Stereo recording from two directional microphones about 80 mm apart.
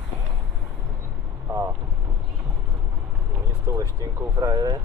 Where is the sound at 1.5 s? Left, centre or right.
Right.